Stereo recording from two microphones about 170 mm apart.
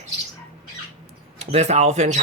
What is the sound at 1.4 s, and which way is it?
Speech, 40° right (ahead or behind).